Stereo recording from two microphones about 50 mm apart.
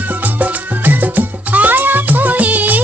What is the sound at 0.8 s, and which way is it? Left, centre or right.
Music, right.